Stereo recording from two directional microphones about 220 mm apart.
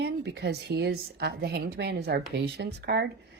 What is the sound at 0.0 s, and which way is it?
A woman's voice, 50° right (ahead or behind).